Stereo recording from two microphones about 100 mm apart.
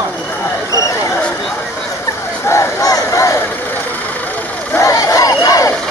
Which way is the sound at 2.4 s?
35° left (ahead or behind).